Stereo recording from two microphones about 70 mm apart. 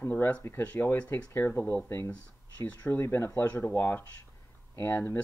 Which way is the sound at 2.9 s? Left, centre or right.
Left.